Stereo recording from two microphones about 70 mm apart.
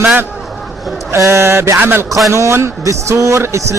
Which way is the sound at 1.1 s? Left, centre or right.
Right.